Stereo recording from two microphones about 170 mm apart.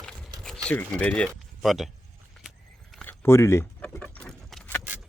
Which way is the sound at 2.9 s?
10° left (ahead or behind).